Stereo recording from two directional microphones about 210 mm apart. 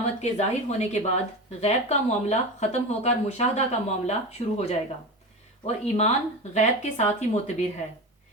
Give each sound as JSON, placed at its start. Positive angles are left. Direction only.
{"t": 0.2, "sound": "speech", "side_deg": 30}